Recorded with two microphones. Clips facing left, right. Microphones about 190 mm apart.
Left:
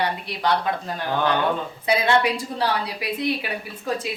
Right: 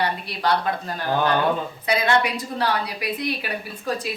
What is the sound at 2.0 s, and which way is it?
A woman's voice, 30° left (ahead or behind).